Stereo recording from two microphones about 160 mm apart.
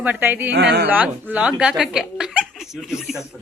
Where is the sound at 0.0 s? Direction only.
10° right (ahead or behind).